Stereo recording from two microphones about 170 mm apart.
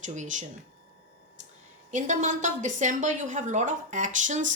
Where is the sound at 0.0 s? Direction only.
45° right (ahead or behind).